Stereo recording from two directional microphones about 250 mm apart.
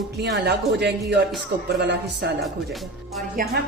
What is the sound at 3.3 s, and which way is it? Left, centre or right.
Speech, right.